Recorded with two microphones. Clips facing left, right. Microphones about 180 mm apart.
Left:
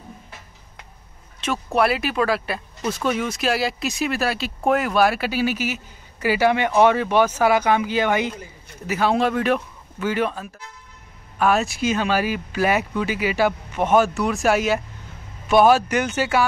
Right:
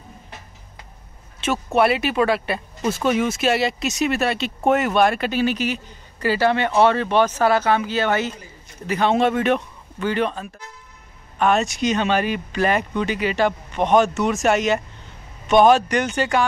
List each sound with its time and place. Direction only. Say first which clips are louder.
1.4 s speech: right 2 dB; 5° right (ahead or behind)
2.8 s speech: right 2 dB; 25° right (ahead or behind)
3.3 s speech: right 2 dB; centre (ahead or behind)